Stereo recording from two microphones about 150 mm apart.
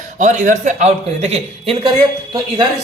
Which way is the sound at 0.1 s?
55° right (ahead or behind).